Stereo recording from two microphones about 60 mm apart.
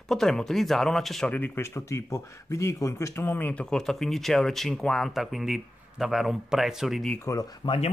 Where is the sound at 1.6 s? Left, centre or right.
Left.